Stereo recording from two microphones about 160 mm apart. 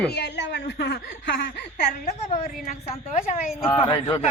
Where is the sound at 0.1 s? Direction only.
90° left.